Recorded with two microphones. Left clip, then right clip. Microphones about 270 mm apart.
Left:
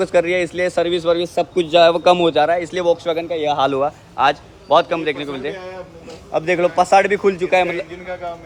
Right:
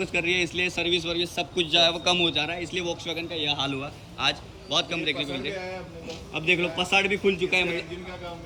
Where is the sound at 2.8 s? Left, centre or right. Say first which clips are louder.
Left 13 dB; centre.